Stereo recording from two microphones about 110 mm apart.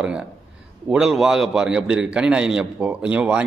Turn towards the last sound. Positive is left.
turn(degrees=-10)  # may be behind; listen again after turning